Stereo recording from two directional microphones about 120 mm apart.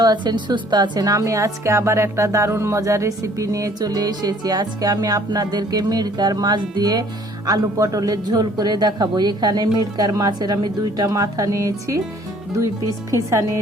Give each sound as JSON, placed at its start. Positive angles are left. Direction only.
{"t": 0.0, "sound": "a woman's voice", "side_deg": -35}
{"t": 13.1, "sound": "a woman's voice", "side_deg": -25}